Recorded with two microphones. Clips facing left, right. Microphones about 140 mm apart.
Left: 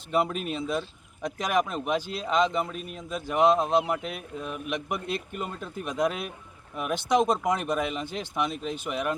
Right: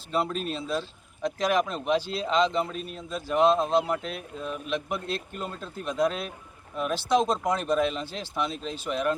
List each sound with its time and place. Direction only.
0.1 s a man's voice: 15° left (ahead or behind)